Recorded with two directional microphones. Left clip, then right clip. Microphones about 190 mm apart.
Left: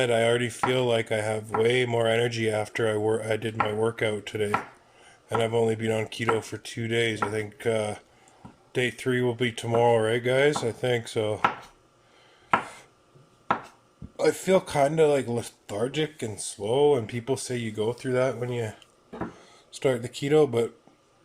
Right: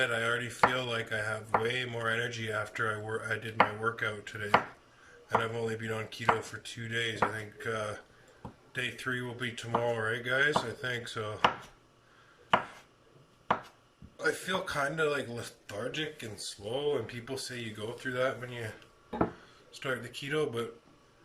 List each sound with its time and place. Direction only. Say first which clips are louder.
0.0 s speech: left 7 dB; 40° left (ahead or behind)
14.2 s speech: left 9 dB; 40° left (ahead or behind)
19.8 s speech: left 10 dB; 40° left (ahead or behind)